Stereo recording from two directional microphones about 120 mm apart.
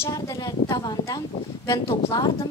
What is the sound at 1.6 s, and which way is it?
Speech, 30° left (ahead or behind).